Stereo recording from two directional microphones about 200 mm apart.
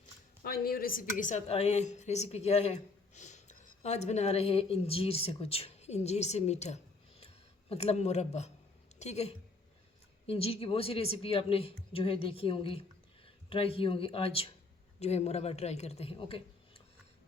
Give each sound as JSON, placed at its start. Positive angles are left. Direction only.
{"t": 0.4, "sound": "a woman's voice", "side_deg": 50}
{"t": 7.2, "sound": "a sound", "side_deg": 30}
{"t": 9.0, "sound": "a woman's voice", "side_deg": 35}